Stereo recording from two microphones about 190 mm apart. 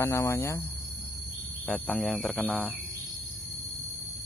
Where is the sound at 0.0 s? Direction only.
15° left (ahead or behind).